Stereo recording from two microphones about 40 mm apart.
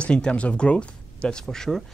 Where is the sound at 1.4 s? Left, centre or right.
Centre.